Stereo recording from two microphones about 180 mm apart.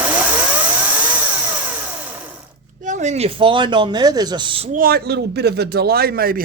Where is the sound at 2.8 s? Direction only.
40° right (ahead or behind).